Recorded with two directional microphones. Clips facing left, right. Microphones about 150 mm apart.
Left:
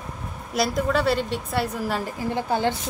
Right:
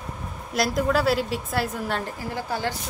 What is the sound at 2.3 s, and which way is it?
Speech, 20° left (ahead or behind).